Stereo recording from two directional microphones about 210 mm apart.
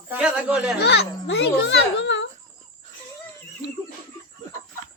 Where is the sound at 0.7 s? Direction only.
50° left (ahead or behind).